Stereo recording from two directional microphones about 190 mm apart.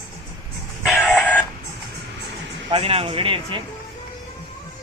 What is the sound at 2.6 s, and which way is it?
Speech, 30° right (ahead or behind).